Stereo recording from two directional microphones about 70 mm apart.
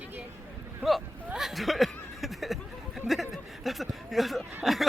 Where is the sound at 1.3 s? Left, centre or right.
Centre.